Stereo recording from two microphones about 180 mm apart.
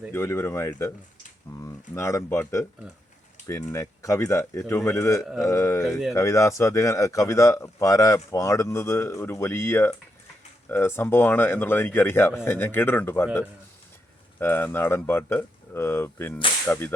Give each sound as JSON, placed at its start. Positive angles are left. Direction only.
{"t": 0.1, "sound": "a man's voice", "side_deg": 15}
{"t": 5.2, "sound": "speech", "side_deg": 0}
{"t": 5.5, "sound": "a man's voice", "side_deg": 15}
{"t": 14.3, "sound": "a man's voice", "side_deg": 10}